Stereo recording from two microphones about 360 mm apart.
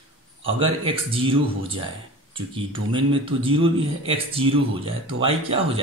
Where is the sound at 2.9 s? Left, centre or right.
Centre.